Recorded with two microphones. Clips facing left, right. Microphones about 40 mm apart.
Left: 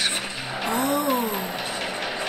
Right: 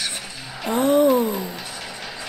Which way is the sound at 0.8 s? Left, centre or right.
Right.